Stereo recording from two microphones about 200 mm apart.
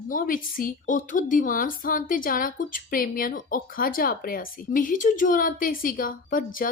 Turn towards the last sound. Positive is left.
turn(degrees=45)  # may be behind; listen again after turning